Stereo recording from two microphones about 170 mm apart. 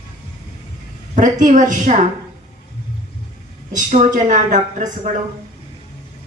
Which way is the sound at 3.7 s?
45° right (ahead or behind).